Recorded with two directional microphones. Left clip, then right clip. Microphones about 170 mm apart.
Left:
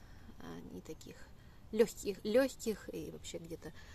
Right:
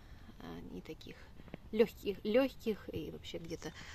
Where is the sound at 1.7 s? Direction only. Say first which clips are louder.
Even; centre (ahead or behind).